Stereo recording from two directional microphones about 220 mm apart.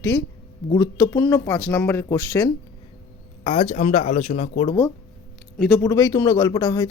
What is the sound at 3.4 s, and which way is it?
Speech, 25° left (ahead or behind).